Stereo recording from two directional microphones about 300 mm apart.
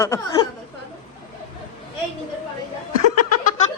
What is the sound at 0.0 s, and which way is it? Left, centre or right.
Speech, centre.